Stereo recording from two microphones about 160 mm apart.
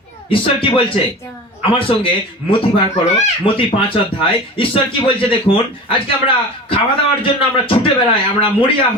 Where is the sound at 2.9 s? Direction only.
35° left (ahead or behind).